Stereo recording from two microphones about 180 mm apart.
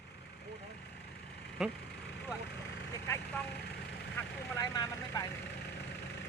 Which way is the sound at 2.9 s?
15° left (ahead or behind).